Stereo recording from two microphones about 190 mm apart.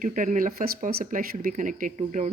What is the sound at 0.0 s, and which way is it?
Speech, 40° right (ahead or behind).